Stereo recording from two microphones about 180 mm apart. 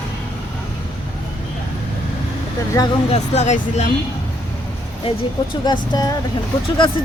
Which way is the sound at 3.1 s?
40° left (ahead or behind).